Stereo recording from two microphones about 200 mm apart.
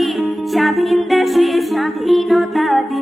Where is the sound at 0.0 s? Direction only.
Centre (ahead or behind).